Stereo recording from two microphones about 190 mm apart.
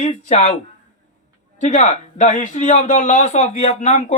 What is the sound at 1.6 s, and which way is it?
Speech, 40° left (ahead or behind).